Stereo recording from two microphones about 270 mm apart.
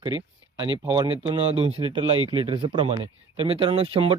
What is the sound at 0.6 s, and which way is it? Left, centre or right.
Speech, centre.